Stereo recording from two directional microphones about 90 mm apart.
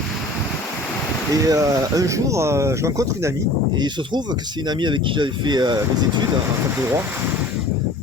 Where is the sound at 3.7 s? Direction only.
55° right (ahead or behind).